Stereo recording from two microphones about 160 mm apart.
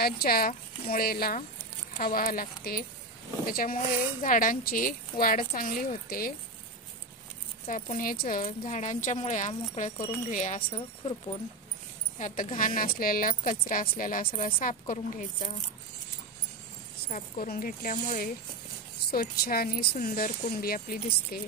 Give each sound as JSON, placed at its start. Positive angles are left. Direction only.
{"t": 0.0, "sound": "speech", "side_deg": 70}
{"t": 7.6, "sound": "speech", "side_deg": 55}
{"t": 12.2, "sound": "speech", "side_deg": 55}
{"t": 17.1, "sound": "speech", "side_deg": 55}
{"t": 19.0, "sound": "speech", "side_deg": 70}